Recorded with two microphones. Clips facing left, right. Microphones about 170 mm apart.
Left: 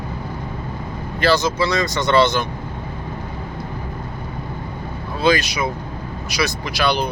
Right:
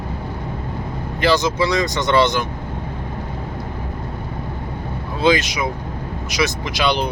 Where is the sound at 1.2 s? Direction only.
20° right (ahead or behind).